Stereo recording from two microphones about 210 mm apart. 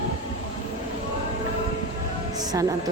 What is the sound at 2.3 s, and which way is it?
Music, 20° right (ahead or behind).